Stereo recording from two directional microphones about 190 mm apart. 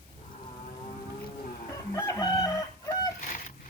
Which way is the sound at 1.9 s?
15° left (ahead or behind).